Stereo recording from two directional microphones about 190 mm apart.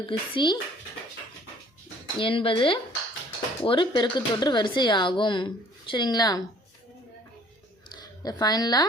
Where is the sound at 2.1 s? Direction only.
30° left (ahead or behind).